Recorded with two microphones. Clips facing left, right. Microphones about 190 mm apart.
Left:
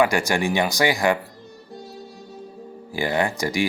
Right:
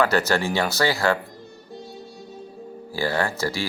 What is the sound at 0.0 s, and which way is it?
Speech, 15° left (ahead or behind).